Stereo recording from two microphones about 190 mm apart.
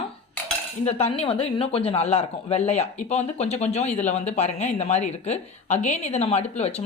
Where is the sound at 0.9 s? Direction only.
35° left (ahead or behind).